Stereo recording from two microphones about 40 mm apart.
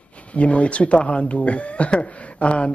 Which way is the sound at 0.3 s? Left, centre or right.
Left.